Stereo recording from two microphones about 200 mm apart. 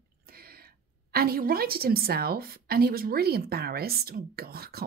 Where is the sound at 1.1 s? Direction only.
50° right (ahead or behind).